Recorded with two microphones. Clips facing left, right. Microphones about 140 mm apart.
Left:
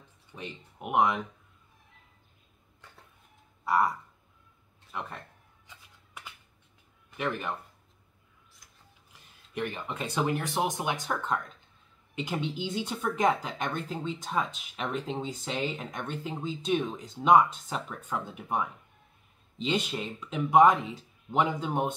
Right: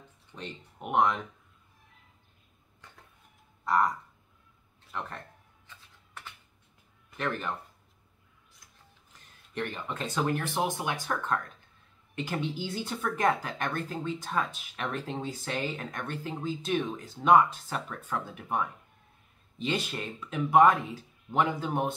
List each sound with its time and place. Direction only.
0.3 s speech: 10° left (ahead or behind)
3.6 s a sound: 10° left (ahead or behind)
4.9 s speech: 10° left (ahead or behind)
5.7 s shuffling cards: 10° left (ahead or behind)
7.2 s speech: 10° left (ahead or behind)
9.1 s speech: 10° left (ahead or behind)